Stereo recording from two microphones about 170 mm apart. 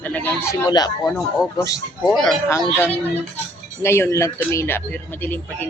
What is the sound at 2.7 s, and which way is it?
Speech, 10° left (ahead or behind).